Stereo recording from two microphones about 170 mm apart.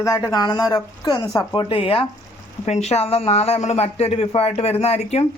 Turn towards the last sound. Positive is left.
turn(degrees=40)  # may be behind; listen again after turning